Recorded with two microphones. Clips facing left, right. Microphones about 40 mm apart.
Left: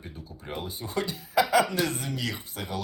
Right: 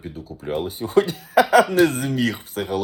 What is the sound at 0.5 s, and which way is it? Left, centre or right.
Speech, right.